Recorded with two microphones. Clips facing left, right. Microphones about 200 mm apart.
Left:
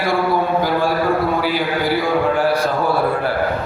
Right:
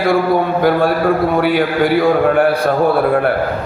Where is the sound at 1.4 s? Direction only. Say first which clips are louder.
Right 6 dB; 55° right (ahead or behind).